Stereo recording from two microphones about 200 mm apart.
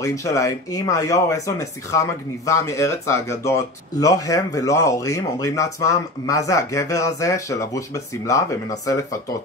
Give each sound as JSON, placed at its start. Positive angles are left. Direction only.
{"t": 0.0, "sound": "speech", "side_deg": 15}